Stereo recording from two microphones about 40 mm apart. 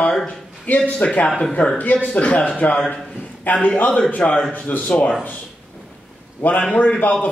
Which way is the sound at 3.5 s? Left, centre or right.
Left.